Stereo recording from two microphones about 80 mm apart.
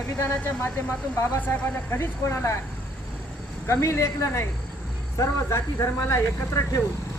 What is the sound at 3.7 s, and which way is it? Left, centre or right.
Speech, left.